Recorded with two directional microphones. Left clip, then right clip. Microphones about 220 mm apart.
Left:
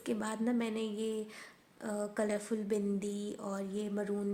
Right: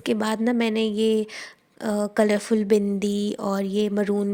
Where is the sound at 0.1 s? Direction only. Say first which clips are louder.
Right 12 dB; 40° right (ahead or behind).